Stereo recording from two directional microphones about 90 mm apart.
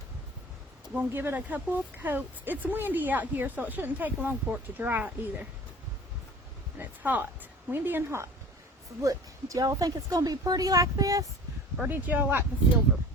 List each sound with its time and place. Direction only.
0.9 s speech: 20° right (ahead or behind)
6.7 s speech: 20° right (ahead or behind)
9.0 s a woman's voice: 40° right (ahead or behind)
11.9 s speech: 20° right (ahead or behind)
12.9 s a sound: 20° right (ahead or behind)